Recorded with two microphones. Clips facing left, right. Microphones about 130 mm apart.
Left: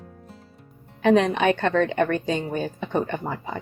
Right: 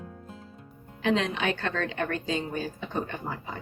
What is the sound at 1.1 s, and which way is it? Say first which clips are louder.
A woman's voice: left 8 dB; 65° left (ahead or behind).